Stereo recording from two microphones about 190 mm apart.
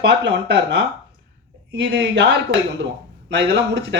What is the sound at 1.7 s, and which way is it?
Speech, 65° right (ahead or behind).